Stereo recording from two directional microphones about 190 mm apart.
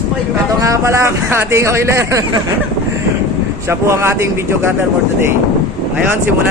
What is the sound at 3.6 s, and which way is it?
Speech, 15° right (ahead or behind).